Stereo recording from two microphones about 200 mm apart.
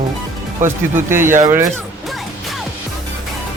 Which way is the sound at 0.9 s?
10° right (ahead or behind).